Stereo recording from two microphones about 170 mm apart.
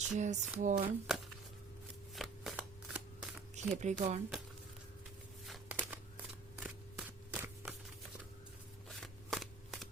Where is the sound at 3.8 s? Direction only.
45° right (ahead or behind).